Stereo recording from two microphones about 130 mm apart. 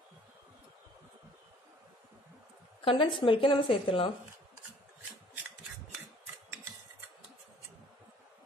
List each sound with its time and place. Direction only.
2.8 s a woman's voice: 45° left (ahead or behind)